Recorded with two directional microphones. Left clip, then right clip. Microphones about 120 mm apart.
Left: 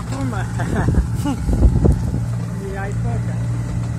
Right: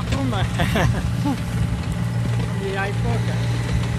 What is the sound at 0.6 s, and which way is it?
Speech, 55° right (ahead or behind).